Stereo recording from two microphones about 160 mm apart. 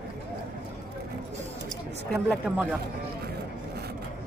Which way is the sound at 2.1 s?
Centre (ahead or behind).